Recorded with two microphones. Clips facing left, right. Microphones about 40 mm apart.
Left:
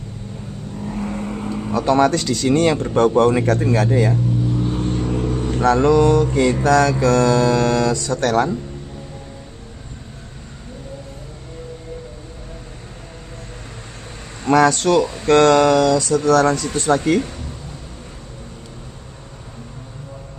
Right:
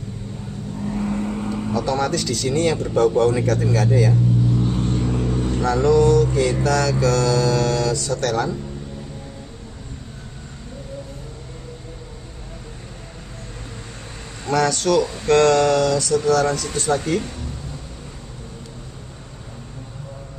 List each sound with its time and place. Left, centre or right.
0.8 s vehicle: centre
1.7 s speech: left
3.2 s mantra: left
4.6 s vehicle: centre
5.6 s mantra: left
14.4 s mantra: left
15.2 s speech: left